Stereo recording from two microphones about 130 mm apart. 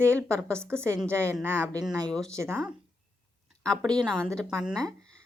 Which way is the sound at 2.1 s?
5° left (ahead or behind).